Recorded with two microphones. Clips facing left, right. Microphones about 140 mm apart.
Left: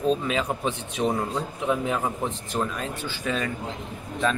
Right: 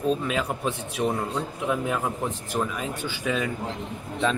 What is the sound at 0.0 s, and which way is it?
Speech, 10° right (ahead or behind).